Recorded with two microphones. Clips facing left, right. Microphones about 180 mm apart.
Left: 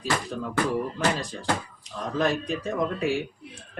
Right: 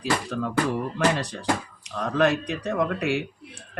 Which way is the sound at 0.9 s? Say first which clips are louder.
Right 3 dB; 75° right (ahead or behind).